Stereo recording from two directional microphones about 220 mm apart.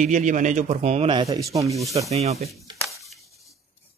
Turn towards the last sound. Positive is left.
turn(degrees=0)  # may be behind; listen again after turning